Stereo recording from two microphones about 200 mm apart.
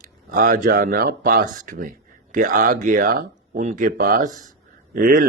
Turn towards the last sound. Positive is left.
turn(degrees=-45)  # may be behind; listen again after turning